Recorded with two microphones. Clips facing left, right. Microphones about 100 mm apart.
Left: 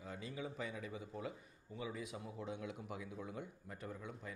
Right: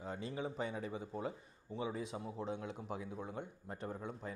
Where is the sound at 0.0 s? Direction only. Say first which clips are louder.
Right 5 dB; 30° right (ahead or behind).